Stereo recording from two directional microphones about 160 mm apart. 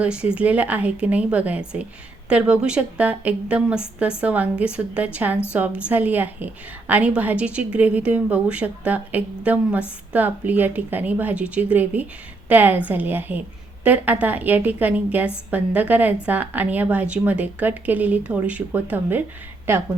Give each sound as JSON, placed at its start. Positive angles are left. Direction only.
{"t": 0.0, "sound": "a woman's voice", "side_deg": -5}